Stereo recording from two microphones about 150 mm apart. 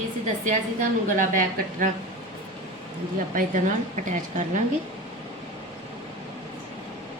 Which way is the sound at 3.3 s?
60° right (ahead or behind).